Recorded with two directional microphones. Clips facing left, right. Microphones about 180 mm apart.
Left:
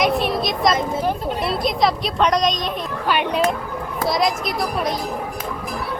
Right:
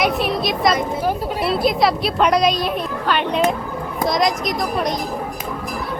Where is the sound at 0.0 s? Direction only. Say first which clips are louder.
Even; centre (ahead or behind).